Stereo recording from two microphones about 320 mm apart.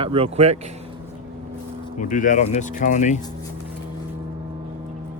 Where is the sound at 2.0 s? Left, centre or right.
Left.